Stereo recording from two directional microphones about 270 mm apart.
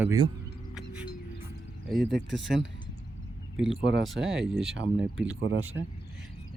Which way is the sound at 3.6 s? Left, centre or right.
Right.